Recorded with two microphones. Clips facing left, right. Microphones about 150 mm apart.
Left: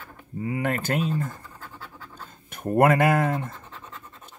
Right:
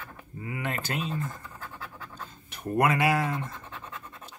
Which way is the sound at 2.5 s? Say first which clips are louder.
Left 6 dB; 50° left (ahead or behind).